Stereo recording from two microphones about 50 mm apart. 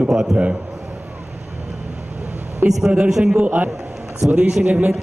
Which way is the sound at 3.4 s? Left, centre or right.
Right.